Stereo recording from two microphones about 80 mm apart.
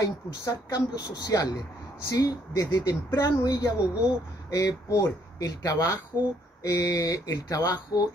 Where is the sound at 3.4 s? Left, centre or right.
Left.